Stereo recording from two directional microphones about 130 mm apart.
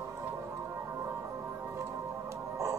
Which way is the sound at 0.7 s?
20° right (ahead or behind).